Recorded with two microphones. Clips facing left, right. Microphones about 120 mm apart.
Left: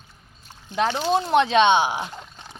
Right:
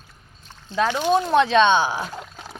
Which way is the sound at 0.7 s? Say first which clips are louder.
Right 2 dB; 15° left (ahead or behind).